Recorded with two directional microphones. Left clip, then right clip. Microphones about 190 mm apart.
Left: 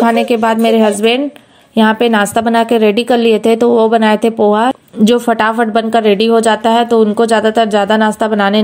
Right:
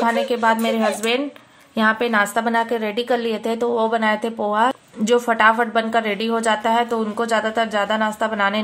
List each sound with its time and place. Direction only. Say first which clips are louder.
0.0 s a woman's voice: left 7 dB; 35° left (ahead or behind)